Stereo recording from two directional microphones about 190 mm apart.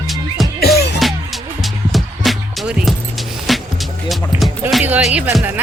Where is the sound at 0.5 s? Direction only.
55° left (ahead or behind).